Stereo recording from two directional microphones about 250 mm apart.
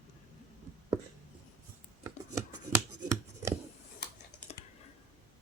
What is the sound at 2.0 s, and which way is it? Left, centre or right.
Chopping, centre.